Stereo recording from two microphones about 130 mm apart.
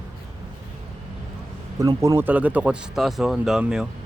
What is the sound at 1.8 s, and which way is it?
Speech, 25° right (ahead or behind).